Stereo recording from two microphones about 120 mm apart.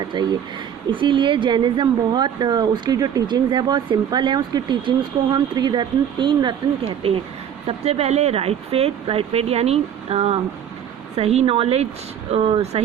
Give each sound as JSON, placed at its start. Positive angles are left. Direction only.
{"t": 0.1, "sound": "a woman's voice", "side_deg": -40}
{"t": 7.7, "sound": "speech", "side_deg": -60}